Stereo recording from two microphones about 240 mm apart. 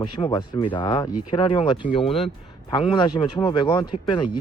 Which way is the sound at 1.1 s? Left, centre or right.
Left.